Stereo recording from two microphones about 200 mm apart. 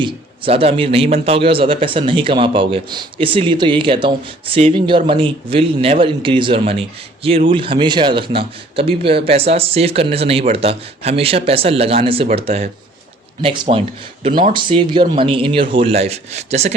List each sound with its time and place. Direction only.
0.0 s a man's voice: 25° right (ahead or behind)